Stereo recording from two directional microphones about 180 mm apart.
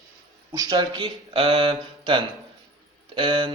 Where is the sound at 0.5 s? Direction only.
20° right (ahead or behind).